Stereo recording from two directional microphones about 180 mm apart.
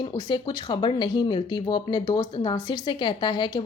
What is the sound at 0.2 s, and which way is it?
Speech, 25° left (ahead or behind).